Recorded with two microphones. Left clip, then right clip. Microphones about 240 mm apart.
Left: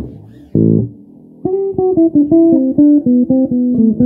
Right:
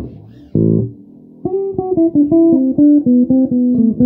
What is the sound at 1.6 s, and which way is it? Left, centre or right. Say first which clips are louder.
Music: left 3 dB; left.